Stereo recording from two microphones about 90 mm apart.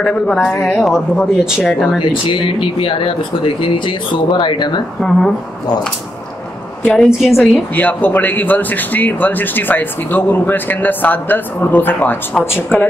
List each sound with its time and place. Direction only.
0.0 s a man's voice: 10° left (ahead or behind)
2.0 s speech: 65° left (ahead or behind)
6.8 s a woman's voice: 10° left (ahead or behind)
7.2 s a man's voice: centre (ahead or behind)
7.7 s speech: 20° left (ahead or behind)